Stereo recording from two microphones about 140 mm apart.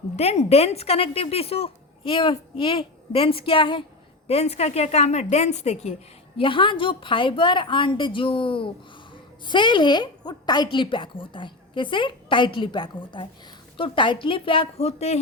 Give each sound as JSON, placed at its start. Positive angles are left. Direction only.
{"t": 0.2, "sound": "a woman's voice", "side_deg": 50}
{"t": 4.3, "sound": "a woman's voice", "side_deg": 50}
{"t": 6.3, "sound": "a woman's voice", "side_deg": 35}